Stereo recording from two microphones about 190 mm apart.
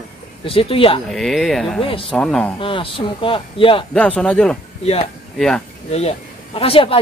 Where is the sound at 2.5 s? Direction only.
30° left (ahead or behind).